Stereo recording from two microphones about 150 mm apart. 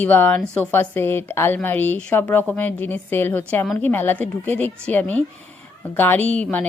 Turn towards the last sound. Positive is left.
turn(degrees=10)  # may be behind; listen again after turning